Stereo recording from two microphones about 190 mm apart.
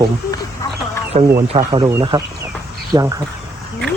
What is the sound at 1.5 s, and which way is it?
Speech, 25° right (ahead or behind).